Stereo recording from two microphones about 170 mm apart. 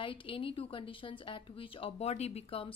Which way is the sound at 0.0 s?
30° left (ahead or behind).